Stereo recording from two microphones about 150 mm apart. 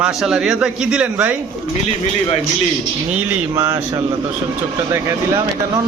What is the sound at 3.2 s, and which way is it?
Speech, 15° right (ahead or behind).